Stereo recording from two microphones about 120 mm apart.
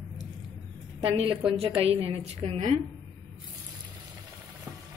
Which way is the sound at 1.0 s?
50° right (ahead or behind).